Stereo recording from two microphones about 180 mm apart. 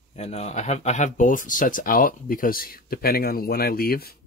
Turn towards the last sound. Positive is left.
turn(degrees=60)  # may be behind; listen again after turning